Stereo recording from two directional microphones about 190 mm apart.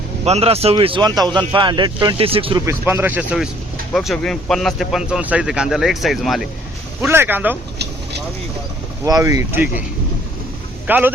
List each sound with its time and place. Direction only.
0.3 s speech: 35° right (ahead or behind)
2.6 s speech: 10° right (ahead or behind)
7.0 s speech: 10° right (ahead or behind)
9.0 s speech: 20° right (ahead or behind)
10.8 s speech: 10° right (ahead or behind)